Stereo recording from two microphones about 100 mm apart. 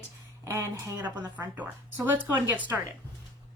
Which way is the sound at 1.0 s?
15° right (ahead or behind).